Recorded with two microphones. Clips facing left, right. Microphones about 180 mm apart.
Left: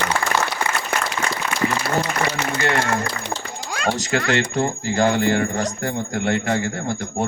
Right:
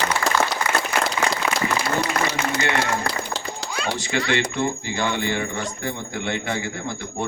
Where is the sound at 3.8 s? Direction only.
45° left (ahead or behind).